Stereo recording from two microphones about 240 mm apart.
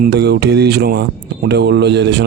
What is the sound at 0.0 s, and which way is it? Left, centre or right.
Speech, right.